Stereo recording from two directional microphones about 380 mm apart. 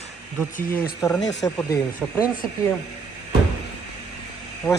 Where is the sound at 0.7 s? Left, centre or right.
Centre.